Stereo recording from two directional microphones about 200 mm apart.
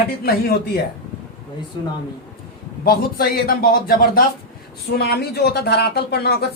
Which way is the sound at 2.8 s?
50° left (ahead or behind).